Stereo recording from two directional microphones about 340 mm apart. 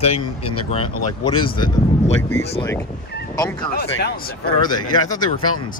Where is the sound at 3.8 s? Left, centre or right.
Left.